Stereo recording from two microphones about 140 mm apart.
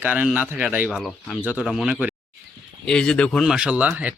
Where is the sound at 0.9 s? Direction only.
5° left (ahead or behind).